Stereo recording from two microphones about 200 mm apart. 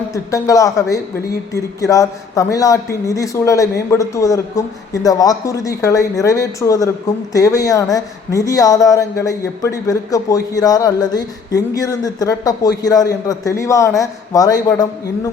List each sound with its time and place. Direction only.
0.1 s speech: 15° left (ahead or behind)